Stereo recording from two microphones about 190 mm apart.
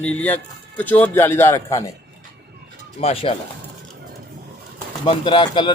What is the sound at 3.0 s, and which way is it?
Speech, 30° left (ahead or behind).